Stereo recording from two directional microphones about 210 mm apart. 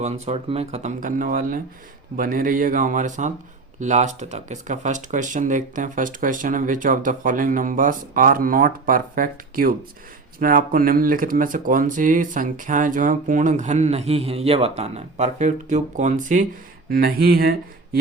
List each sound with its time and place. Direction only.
0.0 s speech: 30° right (ahead or behind); by 17.6 s 45° right (ahead or behind)